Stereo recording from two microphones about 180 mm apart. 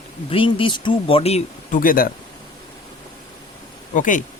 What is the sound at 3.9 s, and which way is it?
Speech, 45° left (ahead or behind).